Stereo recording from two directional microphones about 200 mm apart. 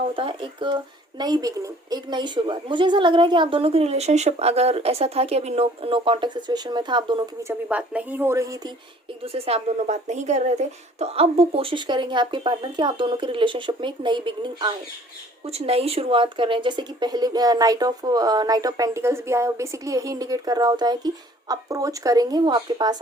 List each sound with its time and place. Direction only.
0.0 s a woman's voice: 25° right (ahead or behind)
7.7 s a woman's voice: 5° right (ahead or behind)
9.2 s a woman's voice: 30° right (ahead or behind)